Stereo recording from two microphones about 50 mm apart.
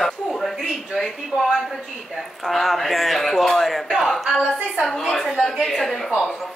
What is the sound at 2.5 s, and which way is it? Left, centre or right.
A man's voice, centre.